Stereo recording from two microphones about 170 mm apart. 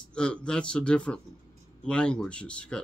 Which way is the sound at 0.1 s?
5° left (ahead or behind).